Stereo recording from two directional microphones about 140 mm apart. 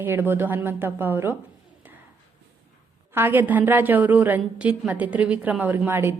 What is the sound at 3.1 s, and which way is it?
A woman's voice, 15° right (ahead or behind).